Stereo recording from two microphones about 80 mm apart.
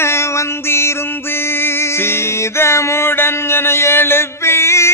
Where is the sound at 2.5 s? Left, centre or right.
Left.